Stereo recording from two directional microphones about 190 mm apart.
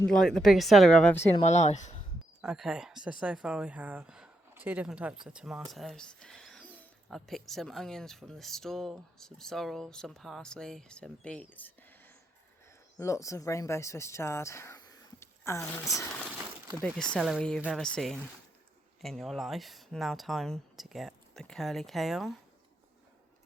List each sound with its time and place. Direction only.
0.1 s speech: 5° left (ahead or behind)
1.4 s speech: 35° left (ahead or behind)
2.4 s speech: 5° right (ahead or behind); by 15.7 s 15° left (ahead or behind)
16.9 s speech: centre (ahead or behind)